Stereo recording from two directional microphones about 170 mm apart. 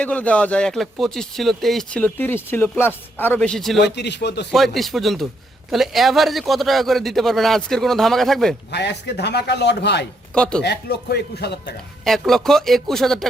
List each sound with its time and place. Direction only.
0.0 s speech: 10° left (ahead or behind)
3.8 s a man's voice: 85° left
4.5 s a man's voice: centre (ahead or behind)
8.7 s a man's voice: 80° left
10.3 s a man's voice: 5° left (ahead or behind)
10.6 s a man's voice: 70° left (ahead or behind)
12.0 s a man's voice: centre (ahead or behind)